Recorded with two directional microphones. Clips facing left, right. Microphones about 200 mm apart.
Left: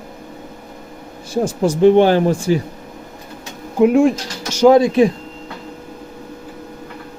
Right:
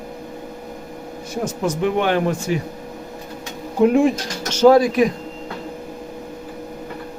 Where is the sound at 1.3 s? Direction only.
30° left (ahead or behind).